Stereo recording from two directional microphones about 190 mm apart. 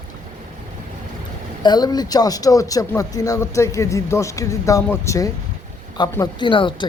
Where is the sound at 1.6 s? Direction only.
20° left (ahead or behind).